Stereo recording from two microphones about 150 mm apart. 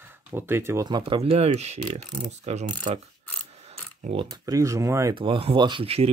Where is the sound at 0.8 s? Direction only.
30° right (ahead or behind).